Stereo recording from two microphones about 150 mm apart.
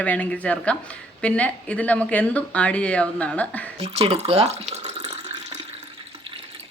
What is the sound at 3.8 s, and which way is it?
Speech, 45° right (ahead or behind).